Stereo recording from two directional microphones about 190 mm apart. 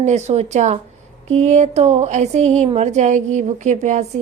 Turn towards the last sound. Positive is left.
turn(degrees=-40)  # may be behind; listen again after turning